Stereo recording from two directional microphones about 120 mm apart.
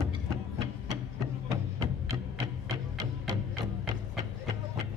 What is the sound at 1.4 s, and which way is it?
Music, 30° right (ahead or behind).